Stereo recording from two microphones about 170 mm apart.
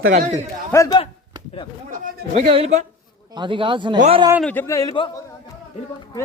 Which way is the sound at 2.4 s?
35° right (ahead or behind).